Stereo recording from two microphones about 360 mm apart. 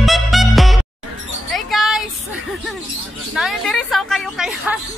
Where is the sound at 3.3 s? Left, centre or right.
Centre.